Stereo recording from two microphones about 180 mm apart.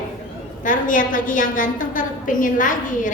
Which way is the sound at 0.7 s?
50° left (ahead or behind).